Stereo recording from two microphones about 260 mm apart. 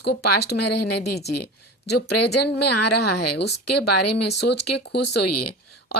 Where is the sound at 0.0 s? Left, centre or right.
Left.